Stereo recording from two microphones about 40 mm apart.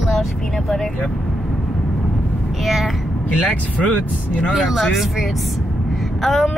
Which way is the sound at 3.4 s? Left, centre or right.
Left.